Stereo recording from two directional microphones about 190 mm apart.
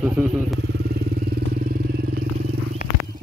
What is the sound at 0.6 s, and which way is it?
Vehicle, 60° right (ahead or behind).